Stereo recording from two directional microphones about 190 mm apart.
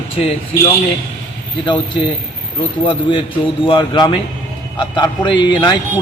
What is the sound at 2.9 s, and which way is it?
Speech, 25° left (ahead or behind).